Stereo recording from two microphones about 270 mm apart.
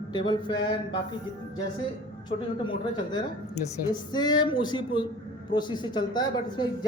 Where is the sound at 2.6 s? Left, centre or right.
Centre.